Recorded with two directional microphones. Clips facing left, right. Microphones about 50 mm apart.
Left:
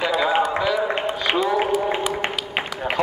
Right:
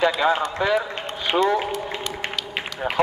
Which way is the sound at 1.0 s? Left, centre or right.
Centre.